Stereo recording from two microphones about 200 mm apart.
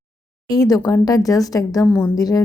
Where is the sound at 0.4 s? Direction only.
15° left (ahead or behind).